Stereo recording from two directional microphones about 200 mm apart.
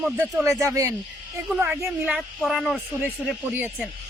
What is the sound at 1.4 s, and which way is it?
Speech, 5° right (ahead or behind).